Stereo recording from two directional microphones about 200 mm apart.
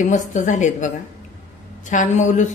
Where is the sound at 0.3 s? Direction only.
40° left (ahead or behind).